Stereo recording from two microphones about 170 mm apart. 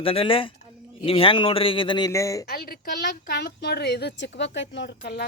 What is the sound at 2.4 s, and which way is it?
Speech, 65° left (ahead or behind).